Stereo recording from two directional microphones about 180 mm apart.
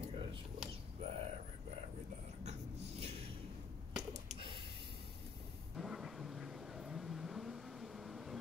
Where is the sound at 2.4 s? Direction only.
40° right (ahead or behind).